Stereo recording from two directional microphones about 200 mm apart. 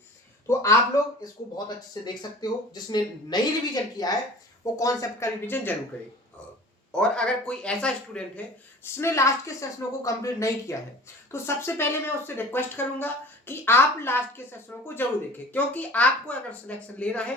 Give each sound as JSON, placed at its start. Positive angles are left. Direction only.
{"t": 0.4, "sound": "a sound", "side_deg": 15}
{"t": 1.2, "sound": "speech", "side_deg": 20}
{"t": 6.9, "sound": "speech", "side_deg": 5}